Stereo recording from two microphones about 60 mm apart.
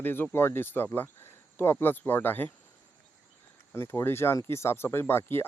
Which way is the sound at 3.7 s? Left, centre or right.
Left.